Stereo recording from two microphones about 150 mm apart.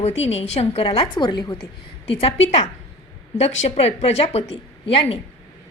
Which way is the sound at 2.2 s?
45° left (ahead or behind).